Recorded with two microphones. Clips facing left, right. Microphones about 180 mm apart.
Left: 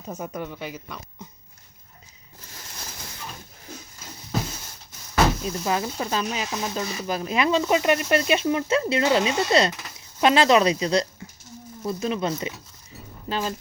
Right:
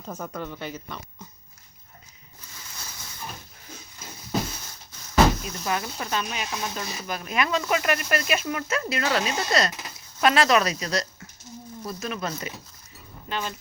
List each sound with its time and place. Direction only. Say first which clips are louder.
0.1 s speech: left 2 dB; 15° left (ahead or behind)
5.4 s speech: left 4 dB; 25° left (ahead or behind)